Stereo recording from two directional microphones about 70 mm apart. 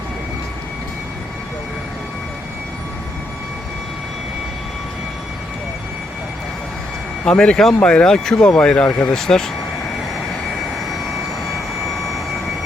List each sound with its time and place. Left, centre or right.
7.3 s speech: centre
9.1 s speech: centre